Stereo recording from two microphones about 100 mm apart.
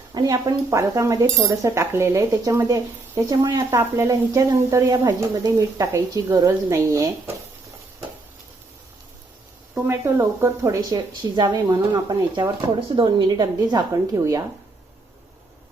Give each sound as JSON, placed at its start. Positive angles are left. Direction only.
{"t": 0.1, "sound": "speech", "side_deg": -40}
{"t": 3.8, "sound": "speech", "side_deg": -30}
{"t": 9.8, "sound": "speech", "side_deg": -25}
{"t": 10.9, "sound": "a woman's voice", "side_deg": -45}